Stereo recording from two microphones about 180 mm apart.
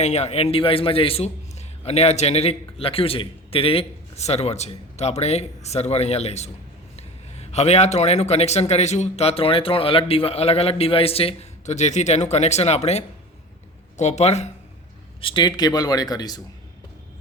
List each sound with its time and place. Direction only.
0.0 s a man's voice: 40° left (ahead or behind)
15.2 s speech: 25° left (ahead or behind)